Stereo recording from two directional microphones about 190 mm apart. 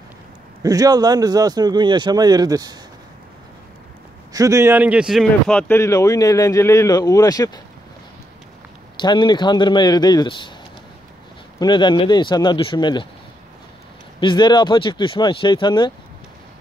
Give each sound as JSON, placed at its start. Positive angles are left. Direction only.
{"t": 0.6, "sound": "speech", "side_deg": -20}
{"t": 4.3, "sound": "speech", "side_deg": -15}
{"t": 9.0, "sound": "speech", "side_deg": 25}
{"t": 11.6, "sound": "speech", "side_deg": 25}
{"t": 14.2, "sound": "speech", "side_deg": 25}